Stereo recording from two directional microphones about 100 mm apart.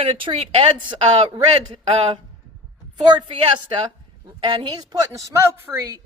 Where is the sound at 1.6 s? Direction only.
50° right (ahead or behind).